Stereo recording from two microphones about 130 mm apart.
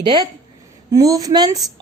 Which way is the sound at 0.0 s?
35° right (ahead or behind).